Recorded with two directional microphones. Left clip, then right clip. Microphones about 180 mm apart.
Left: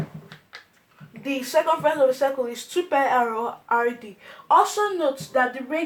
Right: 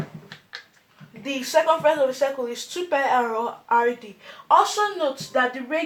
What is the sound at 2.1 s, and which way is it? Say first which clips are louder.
Speech: left 2 dB; 35° left (ahead or behind).